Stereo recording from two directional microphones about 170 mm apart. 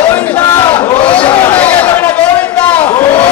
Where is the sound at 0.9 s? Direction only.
30° left (ahead or behind).